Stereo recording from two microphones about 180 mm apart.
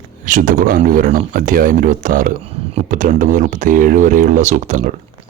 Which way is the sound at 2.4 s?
35° right (ahead or behind).